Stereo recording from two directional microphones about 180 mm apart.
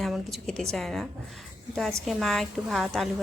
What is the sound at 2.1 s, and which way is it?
Speech, centre (ahead or behind).